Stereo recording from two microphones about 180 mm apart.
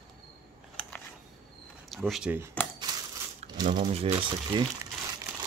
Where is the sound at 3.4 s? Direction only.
40° right (ahead or behind).